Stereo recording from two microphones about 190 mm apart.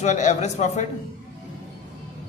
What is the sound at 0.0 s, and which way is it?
Speech, 40° left (ahead or behind).